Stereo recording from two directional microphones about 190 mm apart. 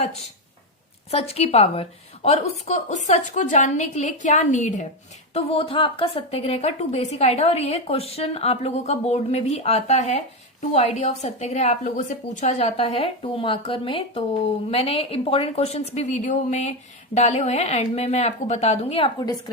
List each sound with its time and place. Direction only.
1.1 s a woman's voice: 30° left (ahead or behind)